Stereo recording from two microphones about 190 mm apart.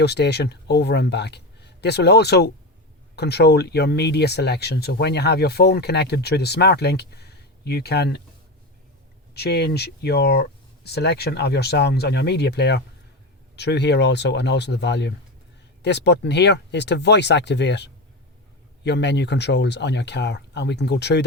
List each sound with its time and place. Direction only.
0.0 s speech: 60° left (ahead or behind)
9.3 s speech: 60° left (ahead or behind)